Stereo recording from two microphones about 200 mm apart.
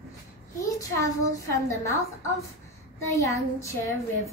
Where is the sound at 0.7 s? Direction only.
15° left (ahead or behind).